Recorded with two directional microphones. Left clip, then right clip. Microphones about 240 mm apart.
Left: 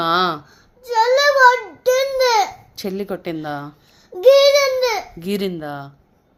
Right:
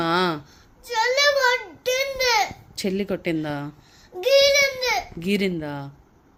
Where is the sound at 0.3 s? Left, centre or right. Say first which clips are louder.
Left 3 dB; right.